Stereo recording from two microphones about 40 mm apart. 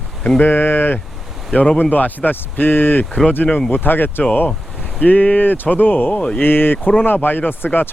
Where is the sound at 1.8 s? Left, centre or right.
Left.